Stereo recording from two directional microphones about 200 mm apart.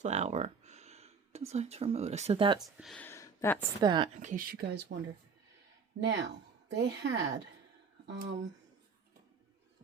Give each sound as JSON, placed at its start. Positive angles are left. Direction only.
{"t": 0.0, "sound": "speech", "side_deg": -35}
{"t": 2.6, "sound": "speech", "side_deg": 0}
{"t": 3.0, "sound": "a sound", "side_deg": 10}
{"t": 3.8, "sound": "a woman's voice", "side_deg": -20}
{"t": 4.2, "sound": "speech", "side_deg": -40}
{"t": 4.5, "sound": "speech", "side_deg": -50}
{"t": 6.0, "sound": "a woman's voice", "side_deg": -65}